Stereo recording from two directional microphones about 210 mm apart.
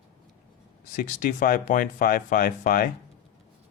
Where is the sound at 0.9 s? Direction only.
40° left (ahead or behind).